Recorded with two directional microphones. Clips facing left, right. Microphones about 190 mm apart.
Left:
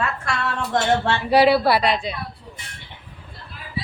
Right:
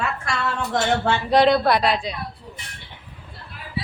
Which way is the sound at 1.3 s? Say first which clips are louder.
Left 1 dB; 10° left (ahead or behind).